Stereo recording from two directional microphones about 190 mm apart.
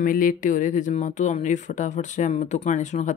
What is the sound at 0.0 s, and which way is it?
Speech, 45° left (ahead or behind).